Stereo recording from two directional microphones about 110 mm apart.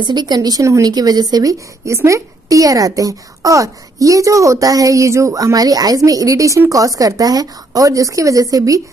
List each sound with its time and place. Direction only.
0.0 s speech: 40° right (ahead or behind)